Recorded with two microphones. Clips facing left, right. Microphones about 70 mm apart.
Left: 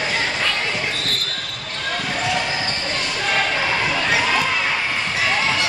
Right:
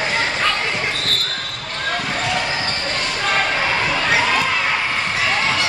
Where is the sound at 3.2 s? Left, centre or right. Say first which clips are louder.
Right 2 dB; centre.